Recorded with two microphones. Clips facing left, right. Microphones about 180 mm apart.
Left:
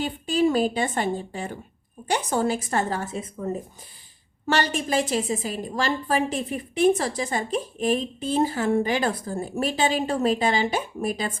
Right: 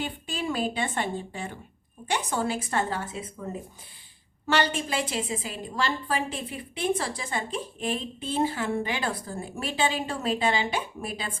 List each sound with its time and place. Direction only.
0.0 s a woman's voice: 40° left (ahead or behind)
4.4 s a woman's voice: 40° left (ahead or behind)